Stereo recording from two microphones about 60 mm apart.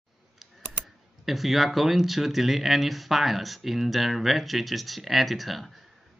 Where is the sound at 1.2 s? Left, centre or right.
Centre.